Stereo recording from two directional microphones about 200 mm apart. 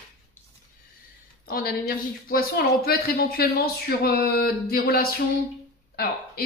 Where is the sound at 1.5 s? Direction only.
45° left (ahead or behind).